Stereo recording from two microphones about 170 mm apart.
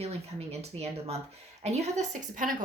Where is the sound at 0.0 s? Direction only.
35° right (ahead or behind).